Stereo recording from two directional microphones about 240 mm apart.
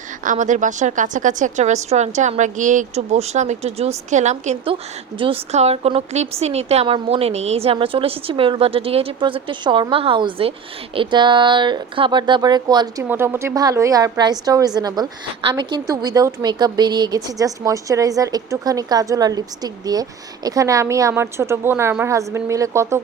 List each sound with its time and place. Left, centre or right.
0.3 s a woman's voice: right; by 23.0 s centre